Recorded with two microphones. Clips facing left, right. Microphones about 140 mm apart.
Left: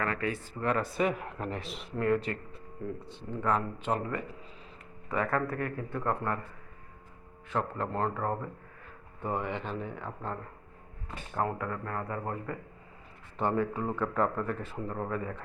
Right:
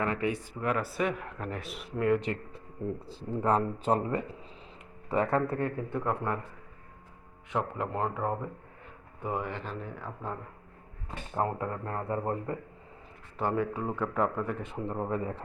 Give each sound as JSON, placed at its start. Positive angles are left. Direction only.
{"t": 0.0, "sound": "speech", "side_deg": -20}
{"t": 2.0, "sound": "speech", "side_deg": -20}
{"t": 3.0, "sound": "speech", "side_deg": -30}
{"t": 7.5, "sound": "speech", "side_deg": -15}
{"t": 11.1, "sound": "speech", "side_deg": -25}
{"t": 13.4, "sound": "speech", "side_deg": -10}